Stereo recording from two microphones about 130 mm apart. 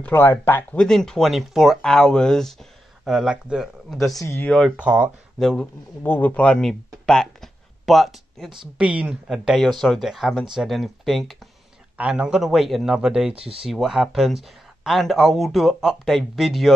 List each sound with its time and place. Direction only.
0.0 s speech: 15° left (ahead or behind)
4.2 s speech: 20° left (ahead or behind)
4.5 s speech: centre (ahead or behind)
4.7 s speech: 10° right (ahead or behind)
5.4 s speech: 5° left (ahead or behind)
13.3 s speech: 45° right (ahead or behind)
13.7 s speech: centre (ahead or behind)